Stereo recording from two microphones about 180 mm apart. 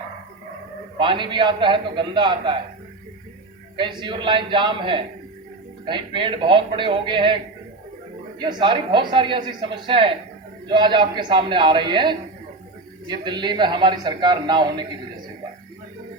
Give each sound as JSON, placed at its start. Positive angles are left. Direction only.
{"t": 0.9, "sound": "a man's voice", "side_deg": -25}
{"t": 3.8, "sound": "a man's voice", "side_deg": -25}
{"t": 8.4, "sound": "a man's voice", "side_deg": -25}